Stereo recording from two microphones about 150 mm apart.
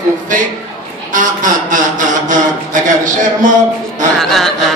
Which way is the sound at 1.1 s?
60° right (ahead or behind).